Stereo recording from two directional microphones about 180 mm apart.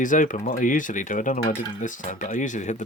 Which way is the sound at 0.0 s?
45° left (ahead or behind).